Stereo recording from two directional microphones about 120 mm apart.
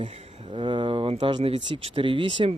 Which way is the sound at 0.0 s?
60° right (ahead or behind).